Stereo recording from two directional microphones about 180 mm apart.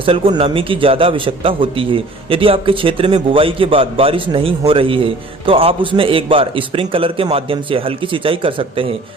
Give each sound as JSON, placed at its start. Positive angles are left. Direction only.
{"t": 0.0, "sound": "a man's voice", "side_deg": -30}